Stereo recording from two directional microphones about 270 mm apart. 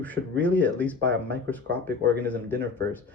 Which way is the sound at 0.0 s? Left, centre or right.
Centre.